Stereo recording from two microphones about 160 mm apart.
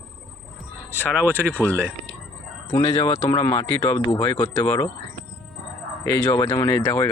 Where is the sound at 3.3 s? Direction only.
20° left (ahead or behind).